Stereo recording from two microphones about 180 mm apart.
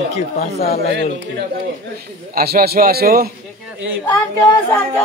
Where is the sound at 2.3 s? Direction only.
60° right (ahead or behind).